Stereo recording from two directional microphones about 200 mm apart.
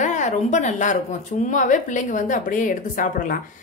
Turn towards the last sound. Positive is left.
turn(degrees=40)  # may be behind; listen again after turning